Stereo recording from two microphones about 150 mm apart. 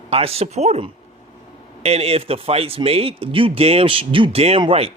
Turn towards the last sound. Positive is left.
turn(degrees=-40)  # may be behind; listen again after turning